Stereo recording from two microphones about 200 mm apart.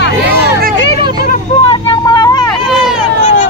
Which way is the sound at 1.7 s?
20° left (ahead or behind).